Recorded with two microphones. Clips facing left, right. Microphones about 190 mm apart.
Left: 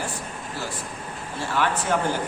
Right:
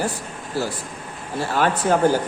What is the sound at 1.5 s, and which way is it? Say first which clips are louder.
Speech: right 4 dB; 40° right (ahead or behind).